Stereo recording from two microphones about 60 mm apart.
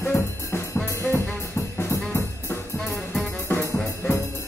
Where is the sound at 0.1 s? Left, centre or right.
Left.